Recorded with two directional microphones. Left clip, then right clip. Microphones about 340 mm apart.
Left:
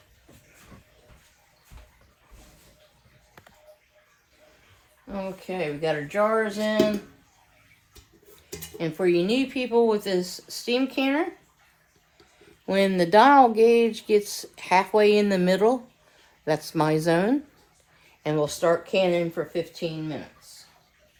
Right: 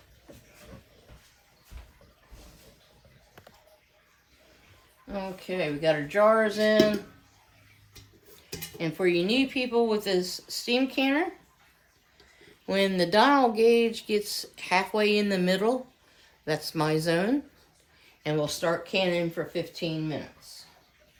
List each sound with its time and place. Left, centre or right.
5.0 s speech: centre
8.8 s speech: centre
12.4 s speech: centre